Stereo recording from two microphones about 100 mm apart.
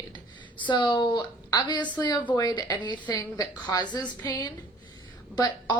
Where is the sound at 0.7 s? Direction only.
50° left (ahead or behind).